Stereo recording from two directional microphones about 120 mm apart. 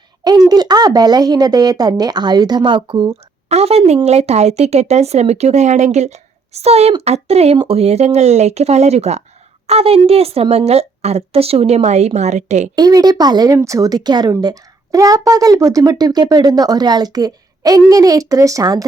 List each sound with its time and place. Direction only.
0.3 s a woman's voice: 35° right (ahead or behind)
3.5 s speech: 60° right (ahead or behind)
12.7 s a woman's voice: 35° right (ahead or behind)